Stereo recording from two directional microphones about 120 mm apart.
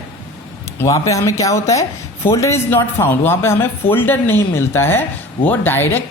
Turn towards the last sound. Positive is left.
turn(degrees=15)  # may be behind; listen again after turning